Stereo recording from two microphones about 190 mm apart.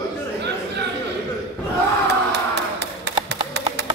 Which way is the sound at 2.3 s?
65° right (ahead or behind).